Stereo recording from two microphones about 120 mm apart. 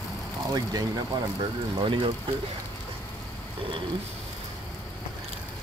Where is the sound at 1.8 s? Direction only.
45° right (ahead or behind).